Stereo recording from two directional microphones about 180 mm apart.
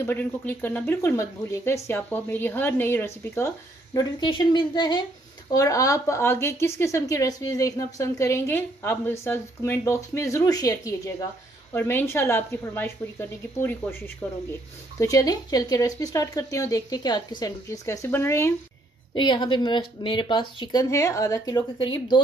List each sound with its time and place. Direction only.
0.0 s speech: 10° left (ahead or behind)
19.1 s a woman's voice: 25° left (ahead or behind)